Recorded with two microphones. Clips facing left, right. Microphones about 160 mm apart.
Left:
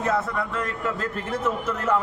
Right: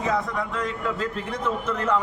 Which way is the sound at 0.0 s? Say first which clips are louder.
Left 1 dB; 5° left (ahead or behind).